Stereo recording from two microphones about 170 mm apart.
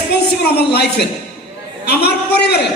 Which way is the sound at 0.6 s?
70° left (ahead or behind).